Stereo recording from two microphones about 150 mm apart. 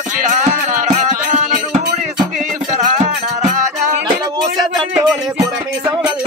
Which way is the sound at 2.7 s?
50° right (ahead or behind).